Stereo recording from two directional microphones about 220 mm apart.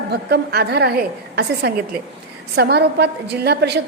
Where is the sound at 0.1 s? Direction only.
45° right (ahead or behind).